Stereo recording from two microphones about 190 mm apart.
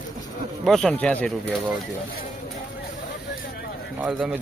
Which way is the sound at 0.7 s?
Centre (ahead or behind).